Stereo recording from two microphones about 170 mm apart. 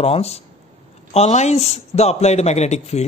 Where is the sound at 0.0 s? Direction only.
35° left (ahead or behind).